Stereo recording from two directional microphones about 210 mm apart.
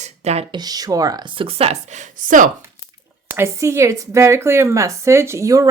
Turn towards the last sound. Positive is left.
turn(degrees=-15)  # may be behind; listen again after turning